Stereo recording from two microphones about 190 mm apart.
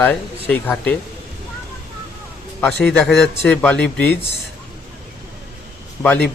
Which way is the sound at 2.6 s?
5° left (ahead or behind).